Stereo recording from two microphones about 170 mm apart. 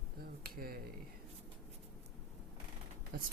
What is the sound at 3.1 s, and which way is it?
Speech, 65° right (ahead or behind).